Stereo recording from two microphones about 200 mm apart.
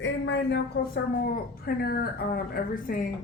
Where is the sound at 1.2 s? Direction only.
50° left (ahead or behind).